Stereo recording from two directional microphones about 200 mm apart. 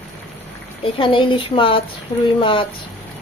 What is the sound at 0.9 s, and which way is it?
Speech, 25° left (ahead or behind).